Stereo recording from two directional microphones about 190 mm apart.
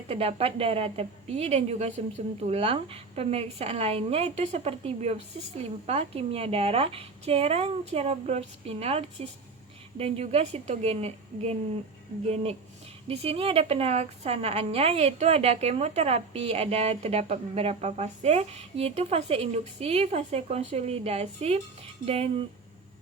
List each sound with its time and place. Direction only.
0.1 s a woman's voice: 30° right (ahead or behind)